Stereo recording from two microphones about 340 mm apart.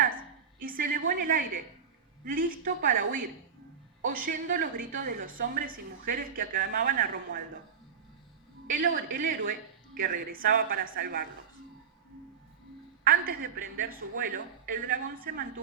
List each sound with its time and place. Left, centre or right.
0.6 s a woman's voice: right
9.1 s a woman's voice: right
13.1 s a woman's voice: right